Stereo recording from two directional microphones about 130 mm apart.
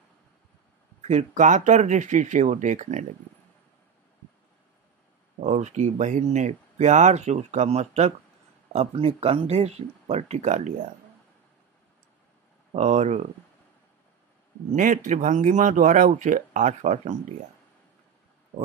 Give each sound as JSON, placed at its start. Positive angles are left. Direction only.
{"t": 1.0, "sound": "speech", "side_deg": -70}
{"t": 5.4, "sound": "speech", "side_deg": -65}
{"t": 12.7, "sound": "speech", "side_deg": -60}
{"t": 14.7, "sound": "speech", "side_deg": -75}